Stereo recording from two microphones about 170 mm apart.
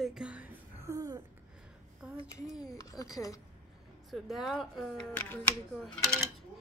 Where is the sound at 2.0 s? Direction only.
5° right (ahead or behind).